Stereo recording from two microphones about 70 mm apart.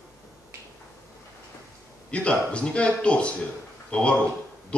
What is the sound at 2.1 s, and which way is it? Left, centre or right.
A man's voice, centre.